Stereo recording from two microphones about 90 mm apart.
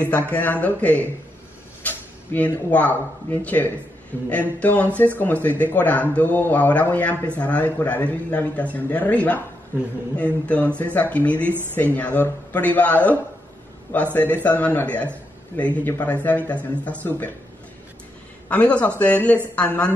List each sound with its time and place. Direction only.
0.0 s a man's voice: 15° left (ahead or behind)
14.1 s a man's voice: 20° left (ahead or behind)
18.5 s a man's voice: 15° left (ahead or behind)